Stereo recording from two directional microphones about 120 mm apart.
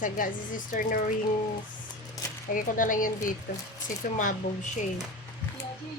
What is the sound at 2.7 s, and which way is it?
A child's voice, 90° left.